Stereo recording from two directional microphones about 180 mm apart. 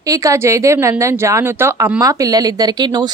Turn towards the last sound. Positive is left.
turn(degrees=-25)  # may be behind; listen again after turning